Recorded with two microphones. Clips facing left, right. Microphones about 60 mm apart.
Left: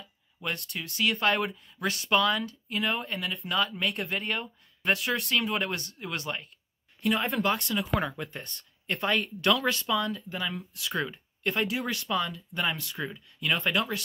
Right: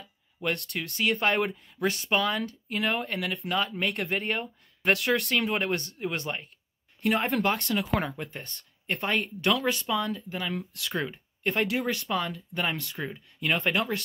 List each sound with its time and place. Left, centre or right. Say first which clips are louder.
0.4 s speech: right 4 dB; right
4.8 s speech: right 3 dB; right
7.0 s speech: right 2 dB; right
7.4 s speech: right 1 dB; right
8.2 s speech: even; right
10.5 s speech: right 3 dB; right
11.0 s speech: even; right